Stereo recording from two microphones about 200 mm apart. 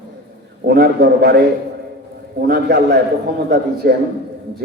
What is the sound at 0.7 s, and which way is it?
Speech, 50° right (ahead or behind).